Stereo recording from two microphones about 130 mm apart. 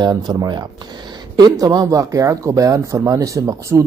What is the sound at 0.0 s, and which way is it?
Speech, 30° right (ahead or behind).